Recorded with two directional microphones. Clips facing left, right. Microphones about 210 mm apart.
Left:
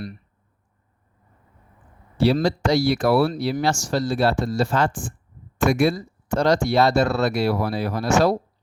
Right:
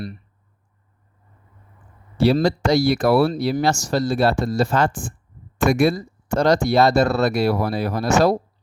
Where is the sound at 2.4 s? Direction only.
45° right (ahead or behind).